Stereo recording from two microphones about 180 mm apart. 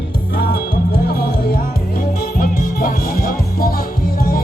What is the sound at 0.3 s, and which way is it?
Music, 60° left (ahead or behind).